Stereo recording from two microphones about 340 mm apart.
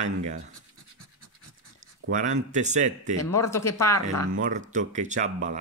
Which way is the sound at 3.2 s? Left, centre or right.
Centre.